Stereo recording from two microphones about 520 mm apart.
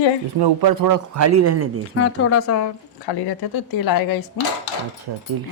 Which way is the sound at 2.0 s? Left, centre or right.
Left.